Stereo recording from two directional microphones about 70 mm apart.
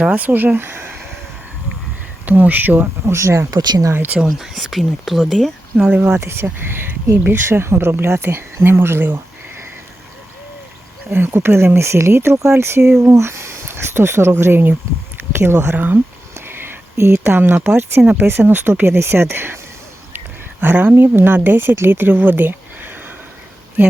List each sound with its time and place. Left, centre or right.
0.0 s speech: right
2.2 s speech: right
3.1 s speech: right
3.5 s speech: right
3.9 s speech: right
4.2 s speech: centre
5.7 s speech: centre
6.1 s speech: right
11.1 s speech: right
16.5 s a sound: right
18.0 s speech: right
18.3 s speech: right